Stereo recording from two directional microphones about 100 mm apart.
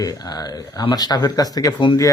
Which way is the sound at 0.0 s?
40° left (ahead or behind).